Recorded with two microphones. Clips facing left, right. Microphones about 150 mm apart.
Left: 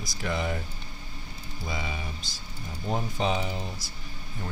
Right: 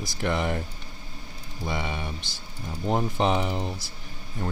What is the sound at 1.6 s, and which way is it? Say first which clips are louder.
Speech: right 4 dB; 65° right (ahead or behind).